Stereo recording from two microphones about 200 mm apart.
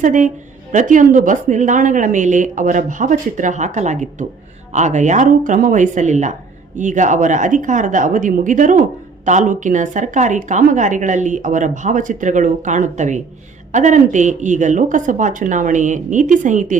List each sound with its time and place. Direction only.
0.0 s a woman's voice: 40° right (ahead or behind)